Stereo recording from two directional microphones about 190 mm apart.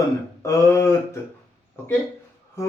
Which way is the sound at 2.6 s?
15° left (ahead or behind).